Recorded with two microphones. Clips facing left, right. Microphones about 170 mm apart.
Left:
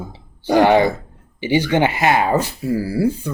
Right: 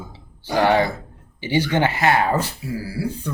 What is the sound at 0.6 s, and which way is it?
Speech, 20° left (ahead or behind).